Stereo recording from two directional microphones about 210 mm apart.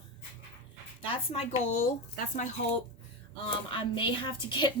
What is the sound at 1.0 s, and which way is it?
Speech, 30° left (ahead or behind).